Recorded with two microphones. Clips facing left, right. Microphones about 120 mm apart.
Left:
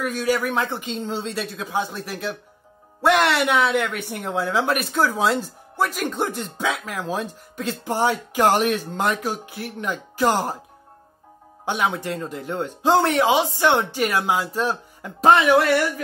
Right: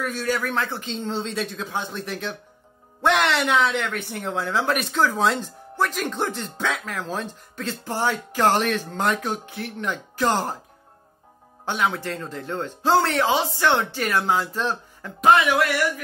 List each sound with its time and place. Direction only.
0.0 s a woman's voice: 10° left (ahead or behind)
11.6 s speech: 15° left (ahead or behind)
15.1 s speech: 30° left (ahead or behind)